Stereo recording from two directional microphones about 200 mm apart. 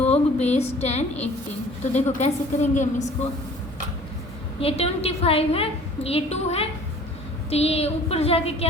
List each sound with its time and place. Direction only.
0.0 s a woman's voice: 35° left (ahead or behind)
4.6 s a woman's voice: 30° left (ahead or behind)